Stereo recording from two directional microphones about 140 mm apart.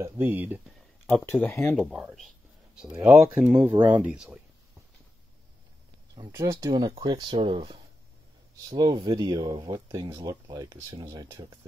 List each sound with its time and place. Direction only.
0.0 s speech: 15° right (ahead or behind)
1.4 s speech: 15° left (ahead or behind)
1.9 s speech: 5° right (ahead or behind)
6.1 s speech: 25° right (ahead or behind)